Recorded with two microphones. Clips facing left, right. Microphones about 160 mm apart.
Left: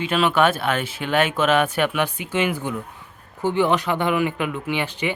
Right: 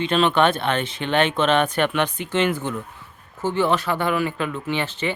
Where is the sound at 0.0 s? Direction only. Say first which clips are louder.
Right 1 dB; 5° left (ahead or behind).